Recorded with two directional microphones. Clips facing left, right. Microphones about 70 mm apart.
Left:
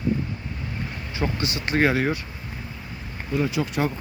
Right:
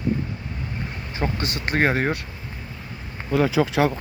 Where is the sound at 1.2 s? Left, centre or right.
Right.